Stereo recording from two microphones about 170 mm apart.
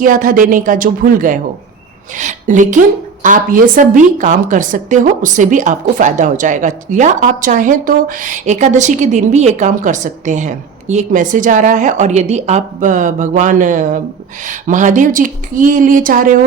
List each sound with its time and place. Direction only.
0.0 s a woman's voice: 55° right (ahead or behind)